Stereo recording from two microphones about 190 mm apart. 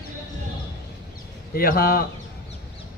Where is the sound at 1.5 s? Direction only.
50° left (ahead or behind).